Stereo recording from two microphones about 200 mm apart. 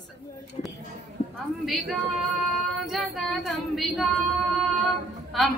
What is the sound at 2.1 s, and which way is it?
Female singing, centre (ahead or behind).